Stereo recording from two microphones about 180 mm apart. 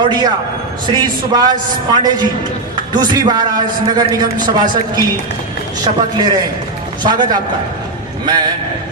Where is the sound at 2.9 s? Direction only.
25° right (ahead or behind).